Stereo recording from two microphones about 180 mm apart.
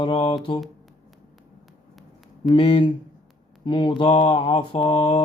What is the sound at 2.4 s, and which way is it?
Mantra, 30° left (ahead or behind).